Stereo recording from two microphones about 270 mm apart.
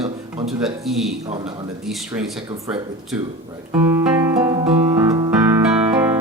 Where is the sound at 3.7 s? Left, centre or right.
Centre.